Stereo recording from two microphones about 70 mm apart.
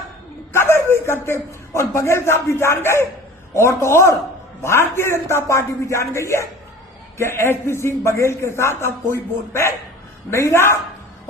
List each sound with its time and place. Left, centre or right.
0.5 s a man's voice: left